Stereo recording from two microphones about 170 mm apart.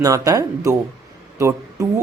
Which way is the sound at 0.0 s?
20° right (ahead or behind).